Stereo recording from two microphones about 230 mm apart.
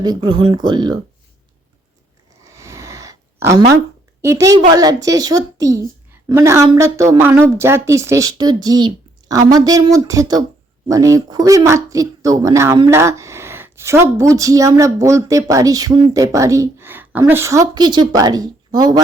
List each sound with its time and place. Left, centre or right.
0.0 s speech: centre
2.4 s a sound: centre
4.2 s a woman's voice: centre